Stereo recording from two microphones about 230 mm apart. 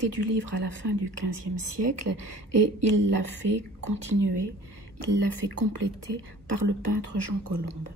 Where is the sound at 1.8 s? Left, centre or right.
Right.